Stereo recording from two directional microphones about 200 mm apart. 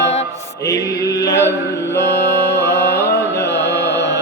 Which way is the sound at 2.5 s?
60° left (ahead or behind).